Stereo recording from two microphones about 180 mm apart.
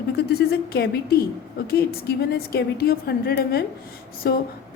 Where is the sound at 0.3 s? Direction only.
60° left (ahead or behind).